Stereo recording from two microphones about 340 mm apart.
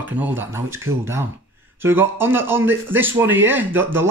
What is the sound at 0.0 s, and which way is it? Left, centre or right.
Speech, centre.